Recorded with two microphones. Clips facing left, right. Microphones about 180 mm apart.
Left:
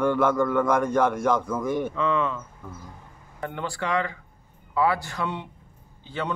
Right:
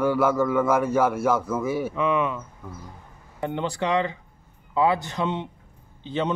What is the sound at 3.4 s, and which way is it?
A man's voice, 20° right (ahead or behind).